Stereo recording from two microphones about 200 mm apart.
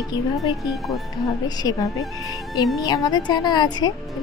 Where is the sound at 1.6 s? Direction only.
15° left (ahead or behind).